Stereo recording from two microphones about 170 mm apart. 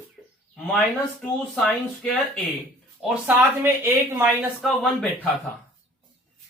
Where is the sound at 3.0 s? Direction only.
10° right (ahead or behind).